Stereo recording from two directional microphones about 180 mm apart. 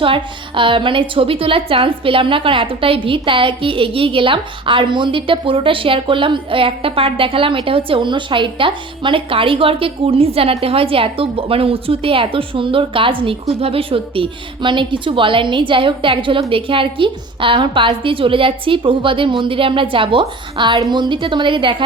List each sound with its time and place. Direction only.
0.0 s a woman's voice: 30° right (ahead or behind)